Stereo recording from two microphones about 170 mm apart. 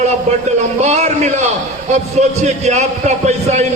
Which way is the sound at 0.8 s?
40° right (ahead or behind).